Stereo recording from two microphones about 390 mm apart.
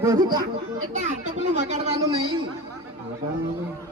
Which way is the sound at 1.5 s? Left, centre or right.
Centre.